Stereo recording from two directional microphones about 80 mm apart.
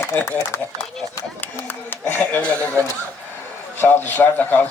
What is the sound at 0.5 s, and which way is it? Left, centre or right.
Speech, left.